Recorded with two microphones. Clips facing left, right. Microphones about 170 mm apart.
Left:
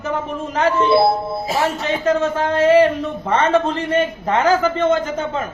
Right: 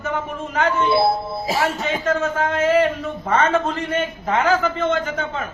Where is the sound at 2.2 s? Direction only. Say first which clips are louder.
Left 4 dB; 35° left (ahead or behind).